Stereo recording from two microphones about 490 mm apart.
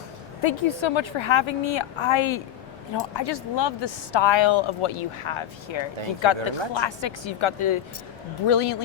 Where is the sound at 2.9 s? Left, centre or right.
Left.